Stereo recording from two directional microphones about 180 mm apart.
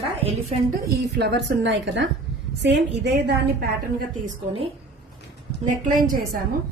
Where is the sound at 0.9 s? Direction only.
65° right (ahead or behind).